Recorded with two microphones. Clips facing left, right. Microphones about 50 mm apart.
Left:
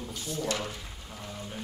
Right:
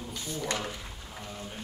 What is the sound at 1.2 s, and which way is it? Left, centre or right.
Speech, centre.